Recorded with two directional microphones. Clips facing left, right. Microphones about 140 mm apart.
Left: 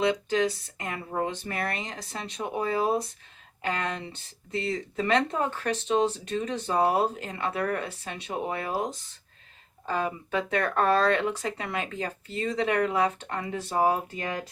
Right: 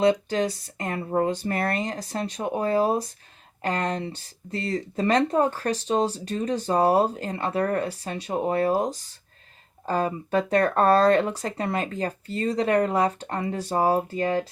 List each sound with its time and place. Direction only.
0.0 s speech: 40° right (ahead or behind)